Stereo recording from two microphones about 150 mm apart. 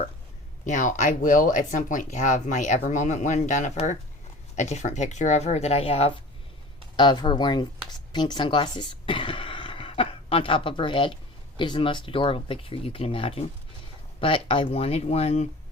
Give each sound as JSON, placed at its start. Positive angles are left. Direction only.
{"t": 0.6, "sound": "speech", "side_deg": 55}
{"t": 6.9, "sound": "speech", "side_deg": 30}